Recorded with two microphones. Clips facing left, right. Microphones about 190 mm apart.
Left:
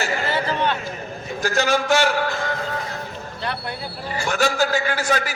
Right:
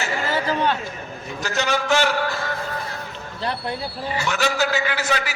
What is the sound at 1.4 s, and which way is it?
Speech, 50° left (ahead or behind).